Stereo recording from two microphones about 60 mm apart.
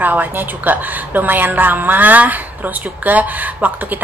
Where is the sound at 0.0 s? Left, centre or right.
Right.